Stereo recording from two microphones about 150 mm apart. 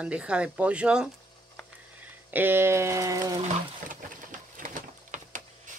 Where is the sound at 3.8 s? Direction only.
60° right (ahead or behind).